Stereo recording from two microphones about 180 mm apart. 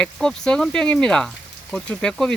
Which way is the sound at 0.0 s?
5° left (ahead or behind).